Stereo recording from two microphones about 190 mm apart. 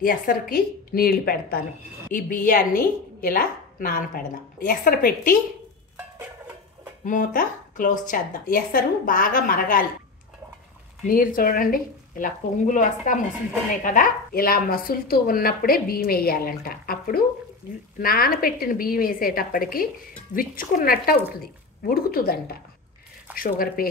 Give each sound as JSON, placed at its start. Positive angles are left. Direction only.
{"t": 0.0, "sound": "speech", "side_deg": 50}
{"t": 5.9, "sound": "music", "side_deg": -10}
{"t": 7.1, "sound": "speech", "side_deg": 45}
{"t": 11.1, "sound": "speech", "side_deg": 45}